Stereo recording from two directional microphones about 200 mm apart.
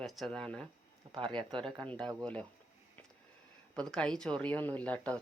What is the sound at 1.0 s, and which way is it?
Speech, 25° right (ahead or behind).